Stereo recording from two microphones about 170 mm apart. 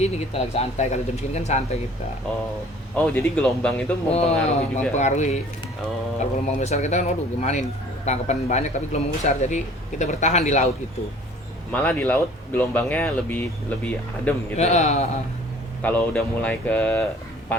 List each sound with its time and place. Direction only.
0.0 s speech: 40° left (ahead or behind)
2.9 s speech: 5° left (ahead or behind)
4.1 s speech: 40° left (ahead or behind)
11.7 s speech: 10° left (ahead or behind)
14.6 s speech: 40° left (ahead or behind)
15.8 s speech: 10° left (ahead or behind)